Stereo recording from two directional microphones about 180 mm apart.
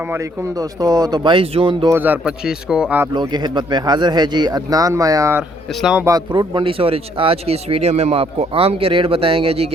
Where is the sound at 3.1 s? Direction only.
25° right (ahead or behind).